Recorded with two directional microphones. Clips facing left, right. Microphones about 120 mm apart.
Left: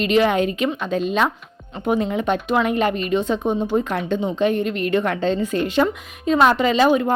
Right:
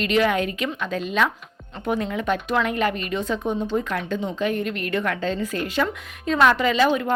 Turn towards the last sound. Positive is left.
turn(degrees=25)  # may be behind; listen again after turning